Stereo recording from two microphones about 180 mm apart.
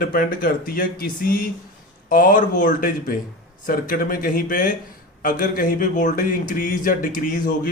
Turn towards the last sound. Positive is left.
turn(degrees=50)  # may be behind; listen again after turning